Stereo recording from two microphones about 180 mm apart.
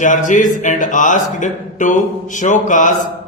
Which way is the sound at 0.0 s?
45° left (ahead or behind).